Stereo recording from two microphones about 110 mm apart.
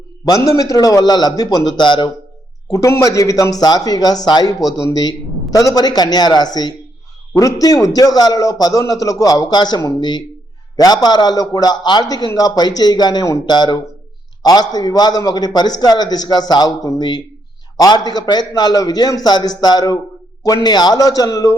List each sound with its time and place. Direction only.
0.3 s a man's voice: 30° left (ahead or behind)
2.6 s a man's voice: 30° left (ahead or behind)